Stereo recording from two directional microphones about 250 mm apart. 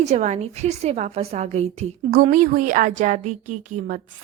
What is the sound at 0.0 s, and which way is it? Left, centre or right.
A woman's voice, right.